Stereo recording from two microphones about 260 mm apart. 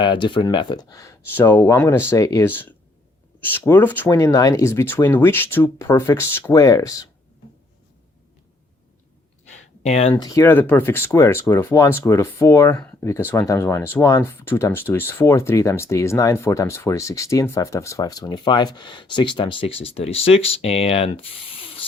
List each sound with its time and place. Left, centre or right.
0.0 s speech: centre
9.8 s speech: left